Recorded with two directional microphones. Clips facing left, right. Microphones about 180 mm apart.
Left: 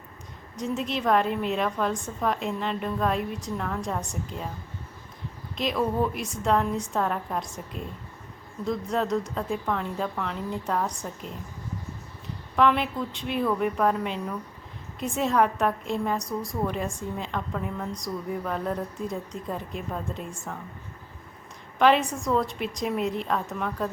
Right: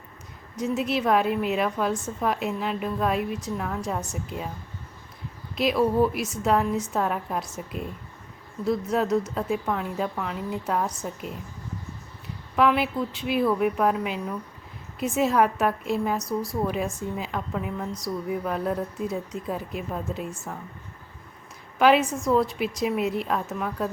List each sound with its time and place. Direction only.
0.5 s a woman's voice: 5° right (ahead or behind)
5.5 s a woman's voice: 5° right (ahead or behind)
12.5 s a woman's voice: 5° right (ahead or behind)
21.8 s a woman's voice: 5° right (ahead or behind)